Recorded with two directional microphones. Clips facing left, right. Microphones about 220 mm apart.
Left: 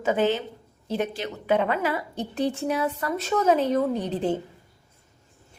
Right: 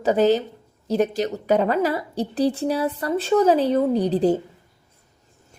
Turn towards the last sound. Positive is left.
turn(degrees=-35)  # may be behind; listen again after turning